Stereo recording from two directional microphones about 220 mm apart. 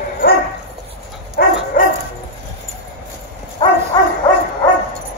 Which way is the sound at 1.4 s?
45° left (ahead or behind).